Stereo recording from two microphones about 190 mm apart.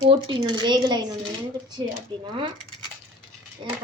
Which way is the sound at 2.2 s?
25° right (ahead or behind).